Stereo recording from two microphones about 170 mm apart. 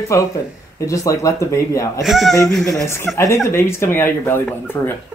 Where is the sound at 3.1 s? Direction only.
20° left (ahead or behind).